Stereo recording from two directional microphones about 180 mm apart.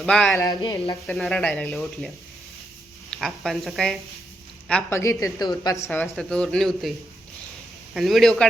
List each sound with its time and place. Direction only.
0.0 s speech: 5° left (ahead or behind)
0.3 s speech: 20° left (ahead or behind)
1.0 s speech: 5° left (ahead or behind)
3.1 s speech: centre (ahead or behind)
4.7 s a woman's voice: 15° left (ahead or behind)
5.9 s speech: 5° left (ahead or behind)
7.9 s speech: centre (ahead or behind)